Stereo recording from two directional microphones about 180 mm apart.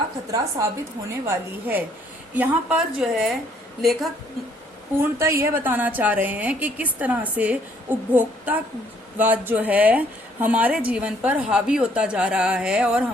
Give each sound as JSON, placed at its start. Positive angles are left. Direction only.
{"t": 0.3, "sound": "a woman's voice", "side_deg": -20}
{"t": 5.2, "sound": "a woman's voice", "side_deg": -15}